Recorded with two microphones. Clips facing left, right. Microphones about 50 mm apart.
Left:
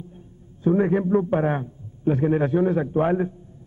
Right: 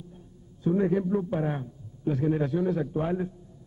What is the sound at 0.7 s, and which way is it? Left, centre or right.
A man's voice, left.